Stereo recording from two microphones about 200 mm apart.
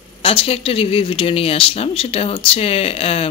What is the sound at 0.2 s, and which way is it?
Speech, 25° left (ahead or behind).